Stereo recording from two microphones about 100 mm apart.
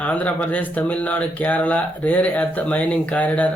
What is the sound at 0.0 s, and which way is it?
Speech, 15° left (ahead or behind).